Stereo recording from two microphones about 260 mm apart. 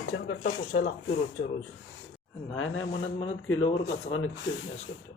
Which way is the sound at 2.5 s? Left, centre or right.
Left.